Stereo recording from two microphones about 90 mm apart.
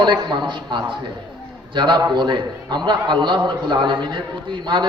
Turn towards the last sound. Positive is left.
turn(degrees=-60)  # may be behind; listen again after turning